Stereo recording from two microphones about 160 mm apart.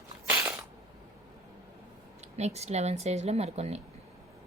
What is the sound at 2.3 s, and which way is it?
Speech, 45° right (ahead or behind).